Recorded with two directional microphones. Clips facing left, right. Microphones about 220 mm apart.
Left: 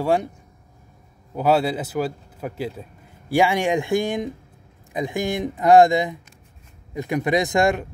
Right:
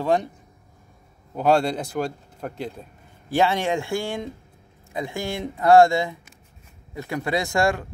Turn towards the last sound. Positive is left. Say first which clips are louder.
# left 3 dB
turn(degrees=20)  # may be behind; listen again after turning